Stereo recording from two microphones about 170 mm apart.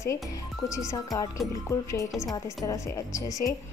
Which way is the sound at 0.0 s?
20° left (ahead or behind).